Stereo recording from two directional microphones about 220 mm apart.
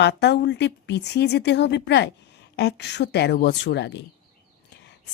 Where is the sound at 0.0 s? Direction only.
50° left (ahead or behind).